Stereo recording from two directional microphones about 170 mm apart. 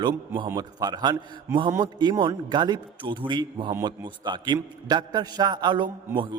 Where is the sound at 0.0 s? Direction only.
25° right (ahead or behind).